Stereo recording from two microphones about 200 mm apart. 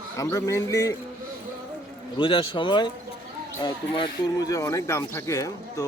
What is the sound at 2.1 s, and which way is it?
A man's voice, 25° left (ahead or behind).